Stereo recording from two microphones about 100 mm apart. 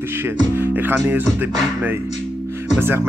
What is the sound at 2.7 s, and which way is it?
Speech, 20° right (ahead or behind).